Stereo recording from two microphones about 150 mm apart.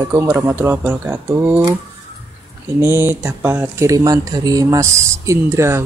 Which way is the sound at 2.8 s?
15° right (ahead or behind).